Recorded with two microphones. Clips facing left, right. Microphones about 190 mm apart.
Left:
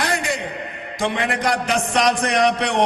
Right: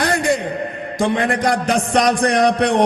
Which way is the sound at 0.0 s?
55° right (ahead or behind).